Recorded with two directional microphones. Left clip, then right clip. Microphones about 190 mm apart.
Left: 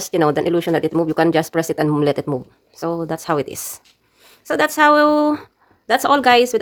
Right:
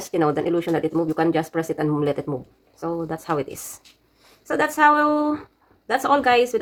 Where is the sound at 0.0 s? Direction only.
40° left (ahead or behind).